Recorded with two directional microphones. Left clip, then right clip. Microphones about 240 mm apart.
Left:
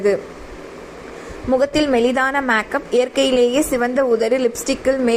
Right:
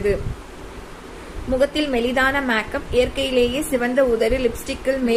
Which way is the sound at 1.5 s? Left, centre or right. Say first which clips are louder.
Left 4 dB; left.